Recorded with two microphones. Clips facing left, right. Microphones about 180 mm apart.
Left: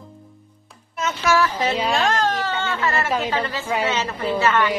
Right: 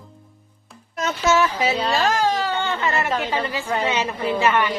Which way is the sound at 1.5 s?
10° right (ahead or behind).